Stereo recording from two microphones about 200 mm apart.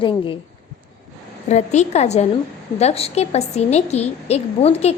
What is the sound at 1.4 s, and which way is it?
A woman's voice, 35° left (ahead or behind).